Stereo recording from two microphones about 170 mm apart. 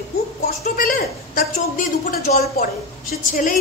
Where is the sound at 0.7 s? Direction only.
55° left (ahead or behind).